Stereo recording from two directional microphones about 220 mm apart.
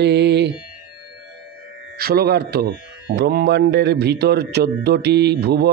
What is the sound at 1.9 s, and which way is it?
A man's voice, 45° right (ahead or behind).